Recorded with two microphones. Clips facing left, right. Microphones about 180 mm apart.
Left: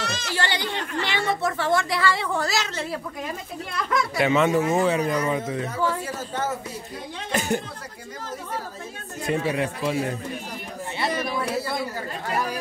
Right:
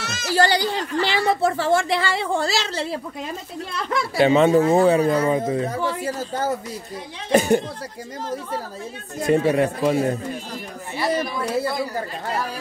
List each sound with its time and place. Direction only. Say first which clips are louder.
0.0 s a sound: right 3 dB; 5° right (ahead or behind)
0.4 s a woman's voice: right 9 dB; 35° right (ahead or behind)
7.3 s speech: right 8 dB; 50° right (ahead or behind)
9.2 s speech: right 7 dB; 45° right (ahead or behind)